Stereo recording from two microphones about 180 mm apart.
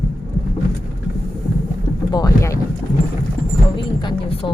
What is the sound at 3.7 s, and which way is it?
Speech, 25° left (ahead or behind).